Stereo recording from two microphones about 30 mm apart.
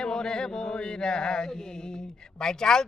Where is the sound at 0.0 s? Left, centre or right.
Left.